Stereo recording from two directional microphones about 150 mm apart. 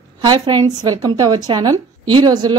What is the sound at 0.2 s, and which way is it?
A woman's voice, 30° right (ahead or behind).